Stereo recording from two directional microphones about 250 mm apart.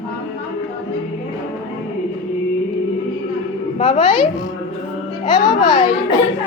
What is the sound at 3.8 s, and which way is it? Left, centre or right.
Speech, left.